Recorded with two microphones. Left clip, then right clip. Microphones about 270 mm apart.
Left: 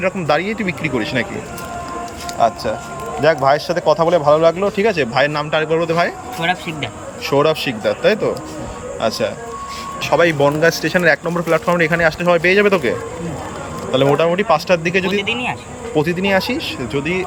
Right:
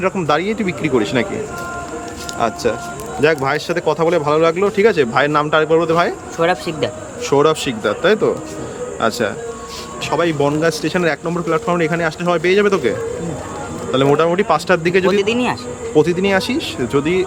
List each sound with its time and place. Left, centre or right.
0.0 s a man's voice: centre
2.4 s a man's voice: centre
13.9 s a man's voice: centre